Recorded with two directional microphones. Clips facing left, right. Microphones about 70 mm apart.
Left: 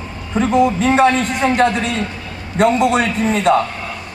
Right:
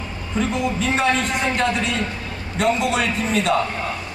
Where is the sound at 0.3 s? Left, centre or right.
Left.